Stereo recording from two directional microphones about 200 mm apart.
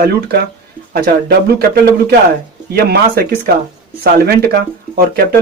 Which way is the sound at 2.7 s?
50° right (ahead or behind).